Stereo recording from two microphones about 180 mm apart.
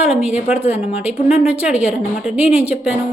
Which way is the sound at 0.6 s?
35° left (ahead or behind).